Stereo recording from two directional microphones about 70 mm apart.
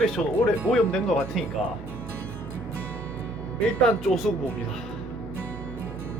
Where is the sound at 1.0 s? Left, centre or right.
Centre.